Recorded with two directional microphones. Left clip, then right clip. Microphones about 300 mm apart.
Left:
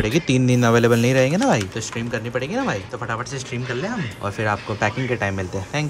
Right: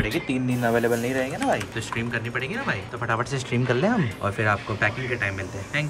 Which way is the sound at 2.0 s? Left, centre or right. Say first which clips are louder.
Left 3 dB; centre.